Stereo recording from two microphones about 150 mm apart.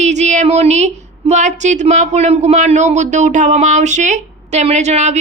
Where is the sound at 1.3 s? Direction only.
50° right (ahead or behind).